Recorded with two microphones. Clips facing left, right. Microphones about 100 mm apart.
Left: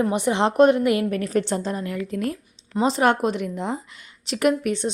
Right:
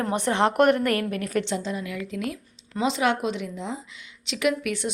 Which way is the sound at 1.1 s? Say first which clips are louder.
Left 3 dB; 35° left (ahead or behind).